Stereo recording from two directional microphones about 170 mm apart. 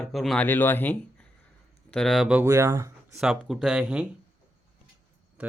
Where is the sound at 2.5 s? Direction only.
15° right (ahead or behind).